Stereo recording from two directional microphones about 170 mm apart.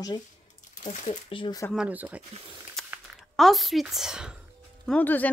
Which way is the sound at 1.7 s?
5° right (ahead or behind).